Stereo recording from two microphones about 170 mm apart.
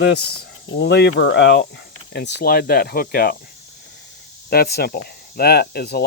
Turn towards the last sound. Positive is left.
turn(degrees=70)  # may be behind; listen again after turning